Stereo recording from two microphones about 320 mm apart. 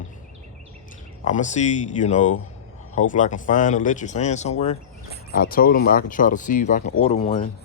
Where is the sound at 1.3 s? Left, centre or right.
Left.